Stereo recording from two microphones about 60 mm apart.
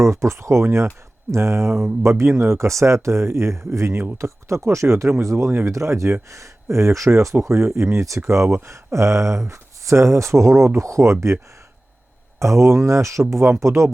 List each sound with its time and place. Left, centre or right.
0.0 s speech: right
5.5 s speech: right
5.7 s speech: right
7.4 s speech: right
8.3 s speech: right
12.4 s speech: right